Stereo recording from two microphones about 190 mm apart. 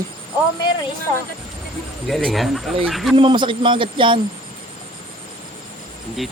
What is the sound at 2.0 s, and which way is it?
Speech, centre (ahead or behind).